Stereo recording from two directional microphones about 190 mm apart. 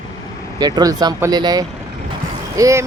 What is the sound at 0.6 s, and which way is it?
Speech, 20° right (ahead or behind).